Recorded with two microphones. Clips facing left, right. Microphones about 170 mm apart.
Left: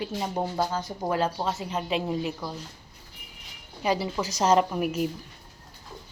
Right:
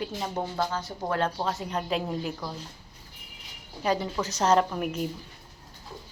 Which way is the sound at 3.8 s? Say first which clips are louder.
Left 1 dB; 10° left (ahead or behind).